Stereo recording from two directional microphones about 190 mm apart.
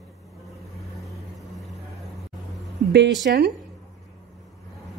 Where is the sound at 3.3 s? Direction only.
60° right (ahead or behind).